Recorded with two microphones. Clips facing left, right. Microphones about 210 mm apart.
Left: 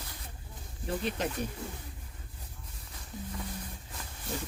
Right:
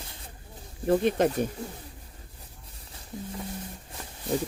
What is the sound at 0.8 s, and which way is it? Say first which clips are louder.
Speech: right 11 dB; 55° right (ahead or behind).